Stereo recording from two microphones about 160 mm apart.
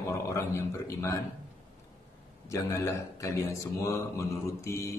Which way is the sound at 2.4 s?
15° left (ahead or behind).